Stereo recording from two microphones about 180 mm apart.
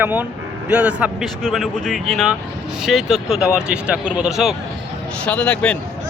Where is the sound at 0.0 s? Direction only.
10° right (ahead or behind).